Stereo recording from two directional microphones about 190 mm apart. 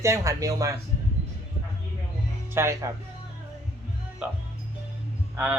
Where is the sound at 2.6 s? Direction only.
15° right (ahead or behind).